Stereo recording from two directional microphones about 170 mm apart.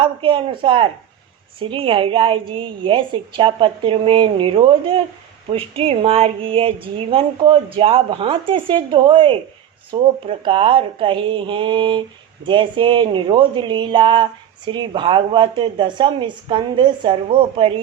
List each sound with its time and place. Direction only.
0.0 s speech: 30° right (ahead or behind)